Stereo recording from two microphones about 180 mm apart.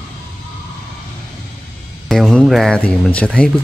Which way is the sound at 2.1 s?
Centre (ahead or behind).